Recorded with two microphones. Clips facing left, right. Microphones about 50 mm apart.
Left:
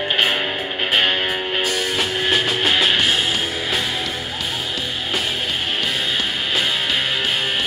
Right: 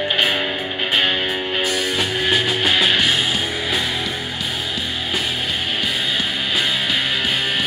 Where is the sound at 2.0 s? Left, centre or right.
Centre.